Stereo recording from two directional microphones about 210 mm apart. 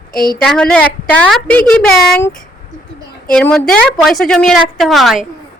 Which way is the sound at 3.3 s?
5° left (ahead or behind).